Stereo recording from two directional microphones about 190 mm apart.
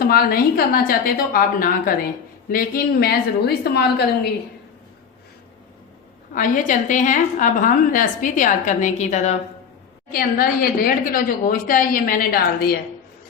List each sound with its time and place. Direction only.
0.0 s a woman's voice: 50° left (ahead or behind)
6.3 s a woman's voice: 45° left (ahead or behind)
10.1 s a woman's voice: 50° left (ahead or behind)